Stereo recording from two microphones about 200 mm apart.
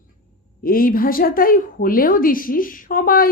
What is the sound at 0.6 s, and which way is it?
A woman's voice, 45° left (ahead or behind).